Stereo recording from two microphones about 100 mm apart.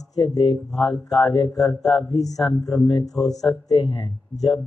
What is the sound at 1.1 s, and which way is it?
Speech, 50° left (ahead or behind).